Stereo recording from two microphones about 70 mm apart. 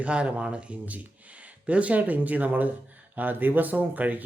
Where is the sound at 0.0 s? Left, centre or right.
Centre.